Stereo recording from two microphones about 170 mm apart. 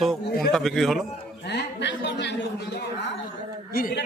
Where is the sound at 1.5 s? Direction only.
90° left.